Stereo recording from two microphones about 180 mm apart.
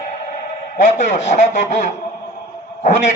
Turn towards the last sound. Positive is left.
turn(degrees=40)  # may be behind; listen again after turning